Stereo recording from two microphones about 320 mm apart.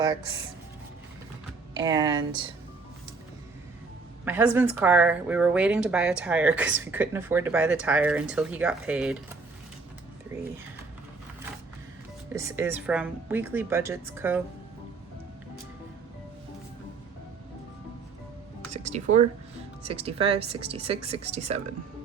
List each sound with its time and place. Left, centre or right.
1.7 s speech: centre
4.3 s speech: centre
12.3 s speech: centre
18.7 s speech: right